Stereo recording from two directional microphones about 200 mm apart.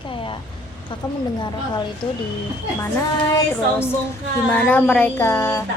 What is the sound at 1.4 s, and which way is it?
Speech, 20° left (ahead or behind).